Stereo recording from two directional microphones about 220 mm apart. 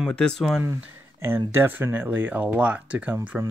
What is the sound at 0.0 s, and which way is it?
Speech, 5° left (ahead or behind).